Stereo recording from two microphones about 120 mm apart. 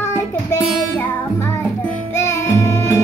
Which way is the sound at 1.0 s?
20° left (ahead or behind).